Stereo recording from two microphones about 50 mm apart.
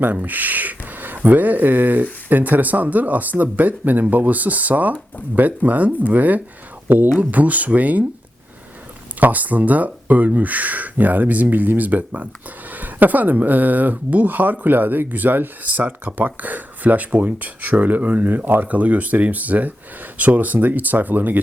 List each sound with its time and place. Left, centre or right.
0.0 s speech: right
9.2 s speech: right